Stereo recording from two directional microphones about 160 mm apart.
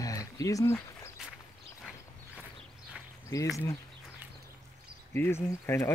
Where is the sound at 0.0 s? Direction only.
20° left (ahead or behind).